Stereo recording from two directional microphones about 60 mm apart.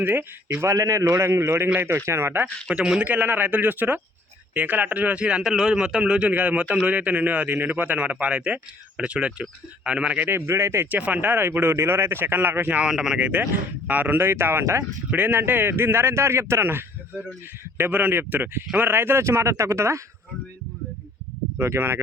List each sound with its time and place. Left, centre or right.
0.0 s speech: right
0.6 s speech: right
2.6 s speech: centre
3.0 s speech: right
10.2 s speech: right
10.9 s speech: right
12.8 s speech: centre
13.1 s speech: right
14.2 s speech: right
15.1 s speech: right
17.7 s speech: right
21.6 s speech: right